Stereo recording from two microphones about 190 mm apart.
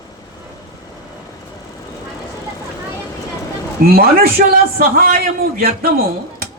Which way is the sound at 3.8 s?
55° right (ahead or behind).